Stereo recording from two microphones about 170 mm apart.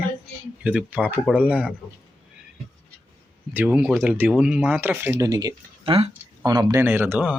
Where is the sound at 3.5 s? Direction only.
10° right (ahead or behind).